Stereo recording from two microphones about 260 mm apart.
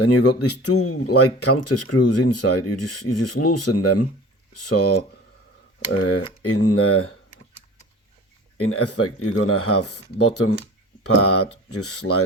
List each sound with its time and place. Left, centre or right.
0.3 s speech: left
8.6 s speech: left